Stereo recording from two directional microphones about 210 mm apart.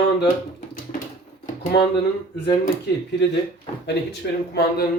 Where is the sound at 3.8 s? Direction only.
55° left (ahead or behind).